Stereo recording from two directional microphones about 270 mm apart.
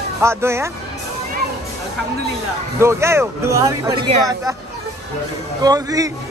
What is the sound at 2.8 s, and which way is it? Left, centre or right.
Speech, centre.